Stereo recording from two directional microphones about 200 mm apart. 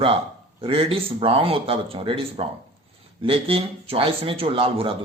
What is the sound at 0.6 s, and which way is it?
A man's voice, 30° right (ahead or behind).